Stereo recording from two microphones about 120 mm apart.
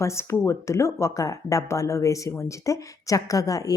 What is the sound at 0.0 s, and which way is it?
Speech, 25° left (ahead or behind).